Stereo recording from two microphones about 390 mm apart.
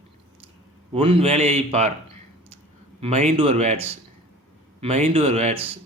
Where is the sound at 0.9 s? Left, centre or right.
Centre.